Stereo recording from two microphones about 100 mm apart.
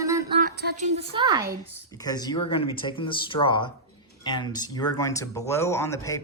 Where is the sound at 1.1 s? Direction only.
45° right (ahead or behind).